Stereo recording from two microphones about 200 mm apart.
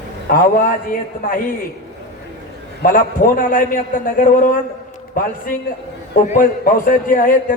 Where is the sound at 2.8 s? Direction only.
45° left (ahead or behind).